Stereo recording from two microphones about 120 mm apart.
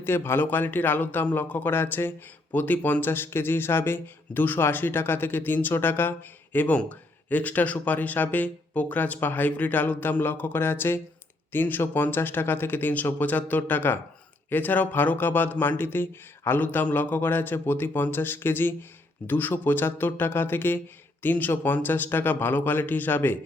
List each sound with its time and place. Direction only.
0.0 s a man's voice: 20° left (ahead or behind)